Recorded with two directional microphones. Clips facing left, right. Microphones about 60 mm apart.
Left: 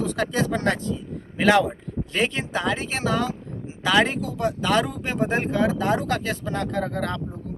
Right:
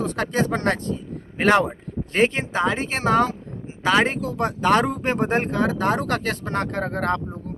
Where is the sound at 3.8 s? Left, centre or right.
Right.